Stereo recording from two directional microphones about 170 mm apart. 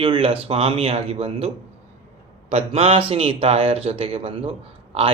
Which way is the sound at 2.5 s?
35° right (ahead or behind).